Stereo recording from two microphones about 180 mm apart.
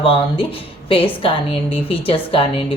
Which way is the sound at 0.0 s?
30° left (ahead or behind).